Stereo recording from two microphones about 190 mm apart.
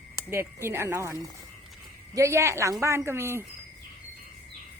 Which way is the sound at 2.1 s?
15° right (ahead or behind).